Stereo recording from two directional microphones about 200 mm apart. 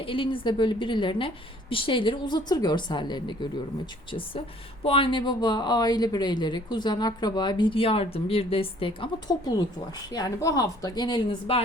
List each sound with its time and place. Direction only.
0.1 s speech: 25° left (ahead or behind)